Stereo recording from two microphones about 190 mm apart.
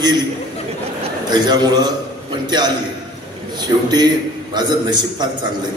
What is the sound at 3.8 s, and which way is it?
A man's voice, 20° right (ahead or behind).